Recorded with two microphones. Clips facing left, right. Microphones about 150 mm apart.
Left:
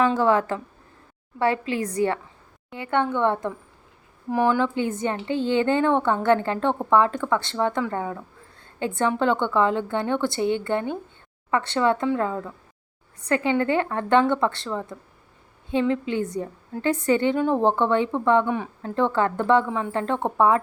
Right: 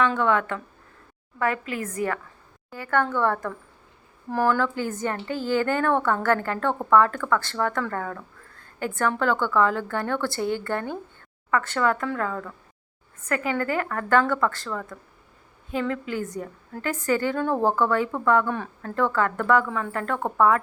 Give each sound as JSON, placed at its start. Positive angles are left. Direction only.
{"t": 0.2, "sound": "a woman's voice", "side_deg": 35}
{"t": 2.6, "sound": "a woman's voice", "side_deg": 20}
{"t": 18.5, "sound": "a woman's voice", "side_deg": 15}